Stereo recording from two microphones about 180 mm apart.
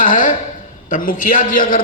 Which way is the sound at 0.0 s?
45° left (ahead or behind).